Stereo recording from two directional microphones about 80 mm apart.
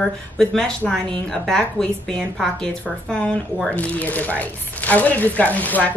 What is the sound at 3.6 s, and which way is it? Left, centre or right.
Speech, centre.